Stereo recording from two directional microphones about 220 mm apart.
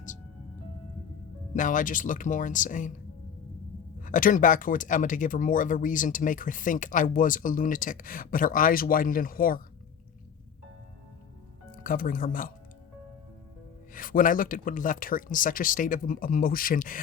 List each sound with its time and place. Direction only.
1.5 s speech: 35° left (ahead or behind)
4.0 s speech: 35° left (ahead or behind)
11.8 s speech: 40° left (ahead or behind)
13.9 s speech: 40° left (ahead or behind)